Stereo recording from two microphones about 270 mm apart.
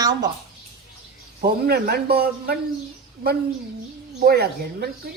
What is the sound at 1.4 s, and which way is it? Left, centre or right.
Speech, right.